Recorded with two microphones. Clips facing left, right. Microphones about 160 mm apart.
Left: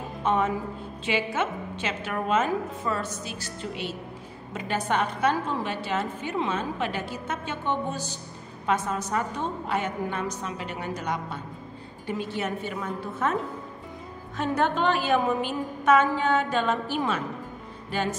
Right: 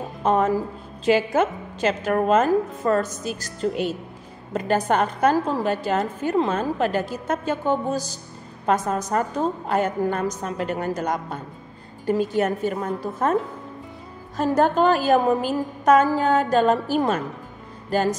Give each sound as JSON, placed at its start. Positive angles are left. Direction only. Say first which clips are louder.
{"t": 0.2, "sound": "a woman's voice", "louder": "right 5 dB", "side_deg": -40}